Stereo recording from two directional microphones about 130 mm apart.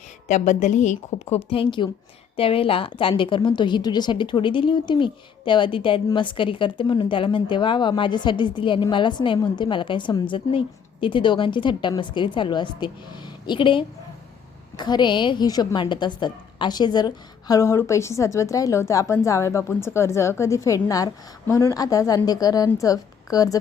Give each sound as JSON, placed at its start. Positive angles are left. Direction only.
{"t": 0.3, "sound": "a woman's voice", "side_deg": 65}
{"t": 17.5, "sound": "a woman's voice", "side_deg": 20}